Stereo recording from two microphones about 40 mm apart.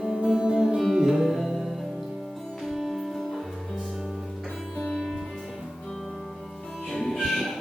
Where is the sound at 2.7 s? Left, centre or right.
Centre.